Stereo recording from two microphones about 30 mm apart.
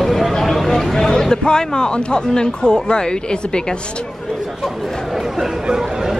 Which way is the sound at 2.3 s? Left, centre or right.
Left.